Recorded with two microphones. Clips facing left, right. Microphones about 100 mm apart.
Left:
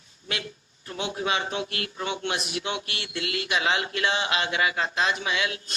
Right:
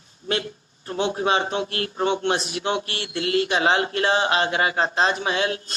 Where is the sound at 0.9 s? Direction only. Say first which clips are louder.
Right 6 dB; 35° right (ahead or behind).